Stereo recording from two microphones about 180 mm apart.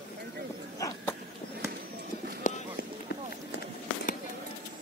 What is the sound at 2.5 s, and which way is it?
Run, 45° left (ahead or behind).